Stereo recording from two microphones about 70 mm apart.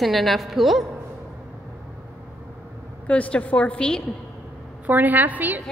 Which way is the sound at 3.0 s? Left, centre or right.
Centre.